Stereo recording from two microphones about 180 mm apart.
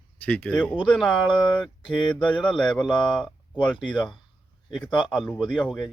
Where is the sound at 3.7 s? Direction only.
25° left (ahead or behind).